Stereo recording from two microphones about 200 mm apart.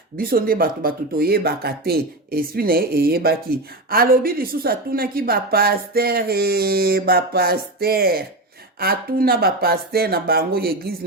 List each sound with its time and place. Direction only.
0.2 s speech: 45° right (ahead or behind)